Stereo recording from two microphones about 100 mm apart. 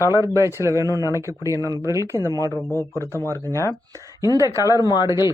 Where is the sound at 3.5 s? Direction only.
25° left (ahead or behind).